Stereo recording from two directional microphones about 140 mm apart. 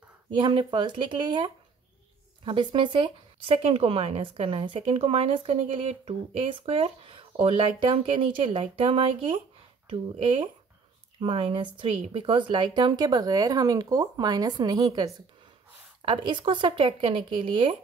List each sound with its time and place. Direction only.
0.4 s speech: 35° right (ahead or behind)